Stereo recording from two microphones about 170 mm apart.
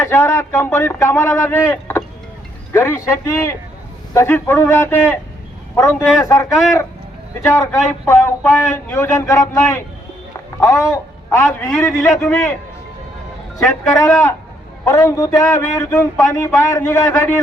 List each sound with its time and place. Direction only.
0.0 s a man's voice: 15° left (ahead or behind)
14.0 s a man's voice: 15° left (ahead or behind)